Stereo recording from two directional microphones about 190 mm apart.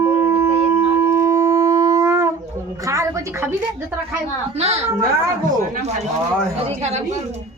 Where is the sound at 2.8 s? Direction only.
15° right (ahead or behind).